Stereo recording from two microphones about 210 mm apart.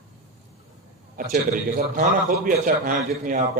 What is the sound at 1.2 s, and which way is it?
A man's voice, 40° right (ahead or behind).